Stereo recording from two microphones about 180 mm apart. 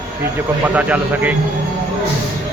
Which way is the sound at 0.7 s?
10° right (ahead or behind).